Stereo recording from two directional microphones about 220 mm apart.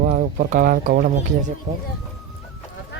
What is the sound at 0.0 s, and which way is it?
Speech, 35° right (ahead or behind).